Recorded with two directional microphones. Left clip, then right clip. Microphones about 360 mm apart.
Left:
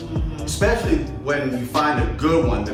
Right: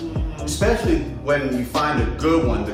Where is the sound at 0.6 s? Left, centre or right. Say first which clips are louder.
Even; centre.